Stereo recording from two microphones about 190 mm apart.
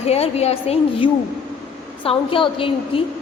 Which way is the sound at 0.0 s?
35° left (ahead or behind).